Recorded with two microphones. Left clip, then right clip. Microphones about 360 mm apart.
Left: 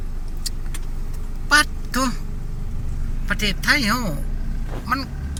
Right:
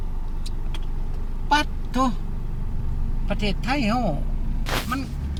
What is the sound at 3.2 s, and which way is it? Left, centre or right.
Speech, centre.